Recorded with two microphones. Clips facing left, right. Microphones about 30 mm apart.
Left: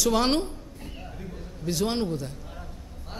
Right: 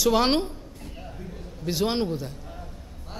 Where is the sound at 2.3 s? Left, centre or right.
Centre.